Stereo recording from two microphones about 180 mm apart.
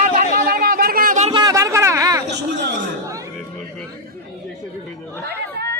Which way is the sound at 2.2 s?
80° right.